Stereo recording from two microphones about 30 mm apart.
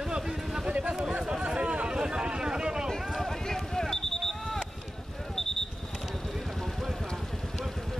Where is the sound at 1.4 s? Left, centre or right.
Right.